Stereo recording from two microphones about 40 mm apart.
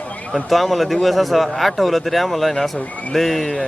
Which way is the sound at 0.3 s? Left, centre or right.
Centre.